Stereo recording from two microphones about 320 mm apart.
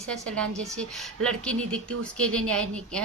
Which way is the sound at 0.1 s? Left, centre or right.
Centre.